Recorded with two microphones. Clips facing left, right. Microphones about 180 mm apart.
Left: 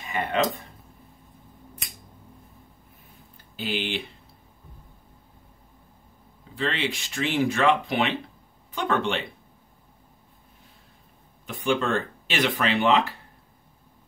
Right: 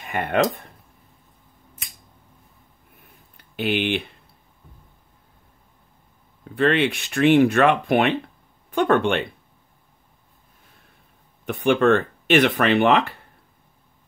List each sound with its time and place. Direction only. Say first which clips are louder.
0.0 s speech: right 4 dB; 55° right (ahead or behind)
3.3 s speech: right 7 dB; 65° right (ahead or behind)
6.5 s speech: right 9 dB; 60° right (ahead or behind)
11.4 s speech: right 7 dB; 65° right (ahead or behind)